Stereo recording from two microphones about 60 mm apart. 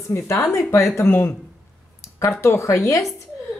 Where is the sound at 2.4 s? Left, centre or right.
Left.